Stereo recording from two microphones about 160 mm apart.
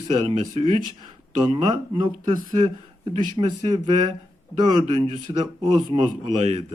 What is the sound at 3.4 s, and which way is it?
A man's voice, 30° right (ahead or behind).